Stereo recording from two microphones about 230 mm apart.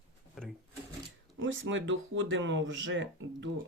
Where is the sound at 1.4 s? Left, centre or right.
Right.